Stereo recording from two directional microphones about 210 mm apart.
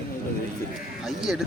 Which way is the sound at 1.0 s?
Centre (ahead or behind).